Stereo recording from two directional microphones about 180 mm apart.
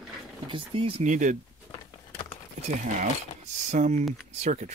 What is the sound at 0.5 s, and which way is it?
Speech, 30° right (ahead or behind).